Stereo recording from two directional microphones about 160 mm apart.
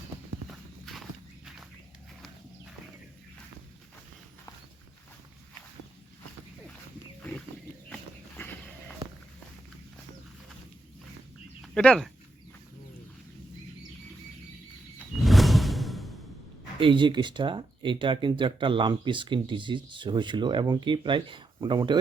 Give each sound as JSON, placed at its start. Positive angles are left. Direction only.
{"t": 0.4, "sound": "clip-clop", "side_deg": 0}
{"t": 7.2, "sound": "wild animals", "side_deg": 10}
{"t": 8.4, "sound": "a sound", "side_deg": 10}
{"t": 11.6, "sound": "speech", "side_deg": 5}
{"t": 15.2, "sound": "music", "side_deg": 0}
{"t": 16.8, "sound": "speech", "side_deg": -30}